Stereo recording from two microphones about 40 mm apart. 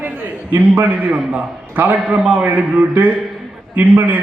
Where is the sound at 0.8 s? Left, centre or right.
Right.